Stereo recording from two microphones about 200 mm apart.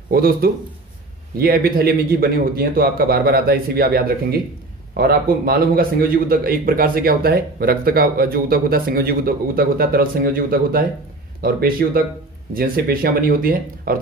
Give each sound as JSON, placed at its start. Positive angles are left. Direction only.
{"t": 0.1, "sound": "a man's voice", "side_deg": -50}